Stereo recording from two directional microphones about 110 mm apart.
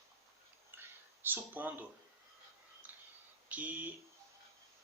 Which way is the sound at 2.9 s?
15° right (ahead or behind).